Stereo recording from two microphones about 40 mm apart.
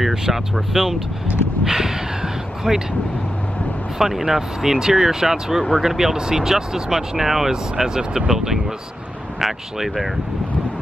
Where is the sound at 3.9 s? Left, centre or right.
Centre.